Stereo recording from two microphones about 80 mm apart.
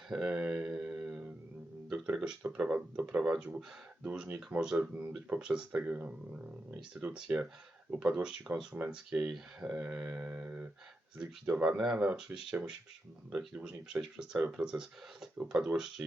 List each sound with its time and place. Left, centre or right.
0.1 s speech: centre